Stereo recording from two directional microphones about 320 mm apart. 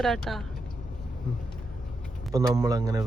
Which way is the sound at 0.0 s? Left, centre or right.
Centre.